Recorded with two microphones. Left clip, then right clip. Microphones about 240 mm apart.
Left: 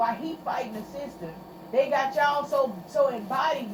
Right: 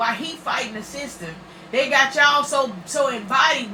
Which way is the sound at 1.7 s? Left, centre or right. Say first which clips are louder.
Right 6 dB; right.